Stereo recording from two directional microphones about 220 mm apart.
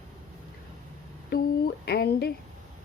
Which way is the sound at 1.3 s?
45° left (ahead or behind).